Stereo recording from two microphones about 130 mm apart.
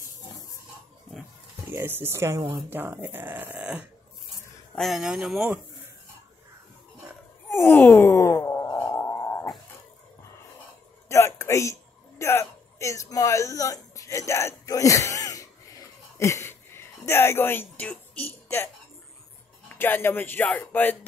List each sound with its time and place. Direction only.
1.7 s speech: 15° right (ahead or behind)
7.4 s wail: 20° left (ahead or behind)
11.1 s a sound: 20° left (ahead or behind)
19.7 s speech: 15° left (ahead or behind)